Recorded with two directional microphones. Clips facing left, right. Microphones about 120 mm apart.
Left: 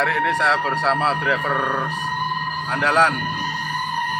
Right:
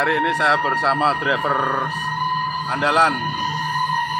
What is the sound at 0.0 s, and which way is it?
Speech, 5° right (ahead or behind).